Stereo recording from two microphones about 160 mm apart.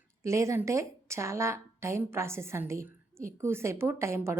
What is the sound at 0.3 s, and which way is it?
A woman's voice, 20° right (ahead or behind).